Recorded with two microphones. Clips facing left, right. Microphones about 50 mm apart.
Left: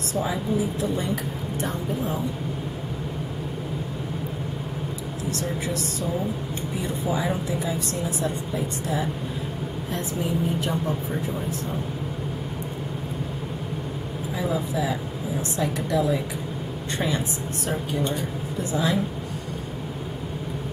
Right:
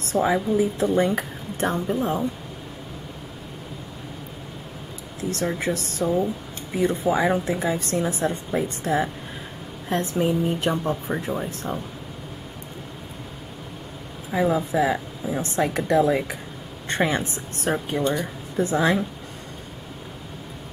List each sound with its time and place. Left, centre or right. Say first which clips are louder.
0.1 s speech: right 5 dB; right
5.3 s speech: right 4 dB; right
14.3 s speech: right 6 dB; right